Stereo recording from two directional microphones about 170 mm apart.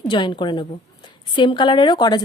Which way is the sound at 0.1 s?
25° left (ahead or behind).